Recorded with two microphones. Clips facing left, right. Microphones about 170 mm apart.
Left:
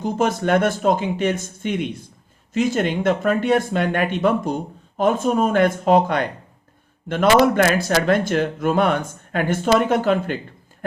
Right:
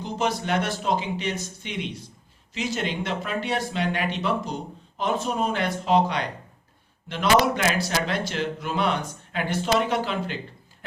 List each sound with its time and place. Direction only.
0.0 s speech: 50° left (ahead or behind)